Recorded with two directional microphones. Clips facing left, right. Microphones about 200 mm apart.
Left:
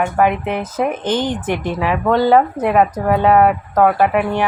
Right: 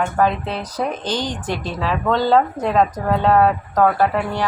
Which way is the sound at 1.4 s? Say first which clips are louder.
Left 4 dB; 15° left (ahead or behind).